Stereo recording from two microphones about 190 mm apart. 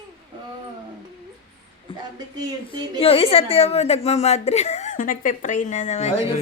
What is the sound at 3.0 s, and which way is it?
A woman's voice, 30° left (ahead or behind).